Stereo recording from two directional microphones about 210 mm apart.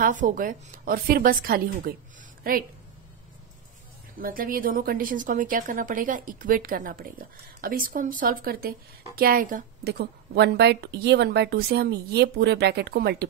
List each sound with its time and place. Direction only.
0.0 s a woman's voice: 40° right (ahead or behind)
4.2 s a woman's voice: 45° right (ahead or behind)